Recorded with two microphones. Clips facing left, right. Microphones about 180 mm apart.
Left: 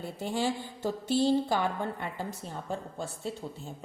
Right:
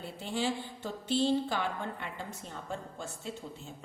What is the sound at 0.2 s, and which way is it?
A woman's voice, 45° left (ahead or behind).